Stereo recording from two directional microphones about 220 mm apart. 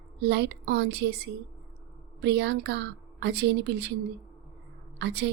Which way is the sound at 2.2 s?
50° right (ahead or behind).